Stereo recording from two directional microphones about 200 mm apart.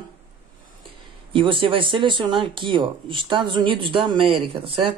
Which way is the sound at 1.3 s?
25° right (ahead or behind).